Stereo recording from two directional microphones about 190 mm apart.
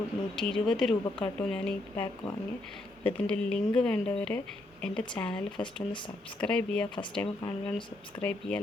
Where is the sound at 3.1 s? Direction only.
5° left (ahead or behind).